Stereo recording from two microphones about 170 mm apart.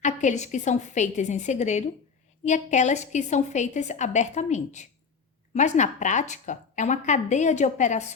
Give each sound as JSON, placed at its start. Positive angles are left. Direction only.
{"t": 0.0, "sound": "a woman's voice", "side_deg": 45}